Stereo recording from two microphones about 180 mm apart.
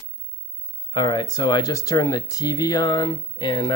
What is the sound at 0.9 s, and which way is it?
Speech, 25° left (ahead or behind).